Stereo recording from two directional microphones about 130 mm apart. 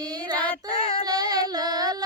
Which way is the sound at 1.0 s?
30° right (ahead or behind).